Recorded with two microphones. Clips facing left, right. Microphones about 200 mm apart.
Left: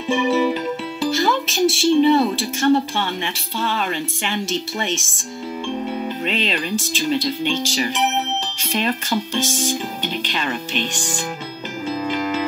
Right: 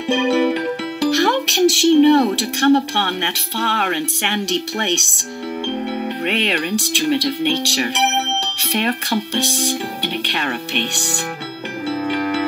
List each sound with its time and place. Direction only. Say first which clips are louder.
0.1 s music: right 2 dB; 75° right (ahead or behind)
2.0 s speech: right 3 dB; 75° right (ahead or behind)
6.2 s speech: right 4 dB; 70° right (ahead or behind)